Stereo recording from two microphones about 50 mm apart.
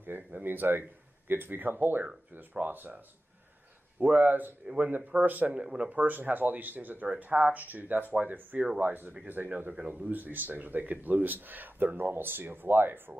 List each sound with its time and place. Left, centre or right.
0.0 s speech: right
4.0 s speech: right
5.6 s speech: right
5.9 s speech: right
9.4 s speech: centre
9.8 s speech: right